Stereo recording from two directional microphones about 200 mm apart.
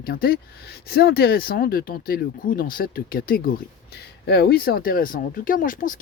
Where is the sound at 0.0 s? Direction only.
50° left (ahead or behind).